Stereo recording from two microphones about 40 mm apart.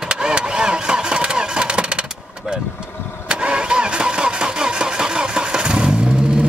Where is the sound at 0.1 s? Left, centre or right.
Right.